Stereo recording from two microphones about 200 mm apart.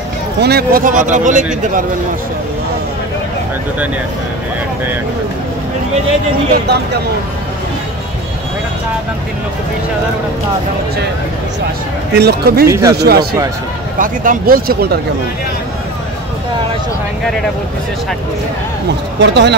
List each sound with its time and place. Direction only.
0.4 s speech: 50° right (ahead or behind)
12.1 s speech: 55° right (ahead or behind)
12.6 s speech: 15° right (ahead or behind)
12.9 s speech: 55° right (ahead or behind)
19.1 s speech: 60° right (ahead or behind)